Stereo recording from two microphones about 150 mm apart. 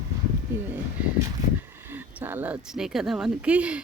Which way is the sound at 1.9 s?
15° right (ahead or behind).